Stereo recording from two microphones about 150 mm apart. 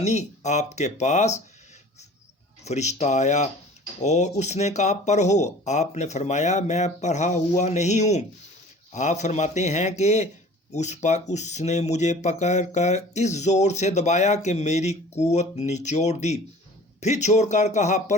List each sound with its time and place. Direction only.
0.0 s speech: 50° left (ahead or behind)
2.6 s speech: 50° left (ahead or behind)